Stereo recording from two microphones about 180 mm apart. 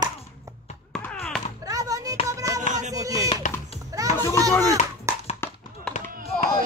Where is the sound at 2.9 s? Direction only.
20° right (ahead or behind).